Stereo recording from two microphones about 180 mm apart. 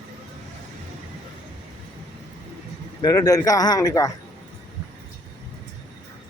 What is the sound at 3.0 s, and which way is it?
Speech, 20° left (ahead or behind).